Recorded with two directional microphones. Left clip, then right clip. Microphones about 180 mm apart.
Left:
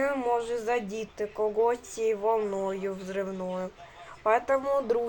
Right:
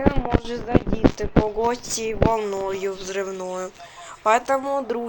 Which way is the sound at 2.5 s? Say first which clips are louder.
Right 5 dB; 30° right (ahead or behind).